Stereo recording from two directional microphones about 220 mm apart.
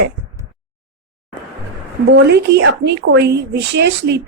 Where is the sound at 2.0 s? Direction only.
50° right (ahead or behind).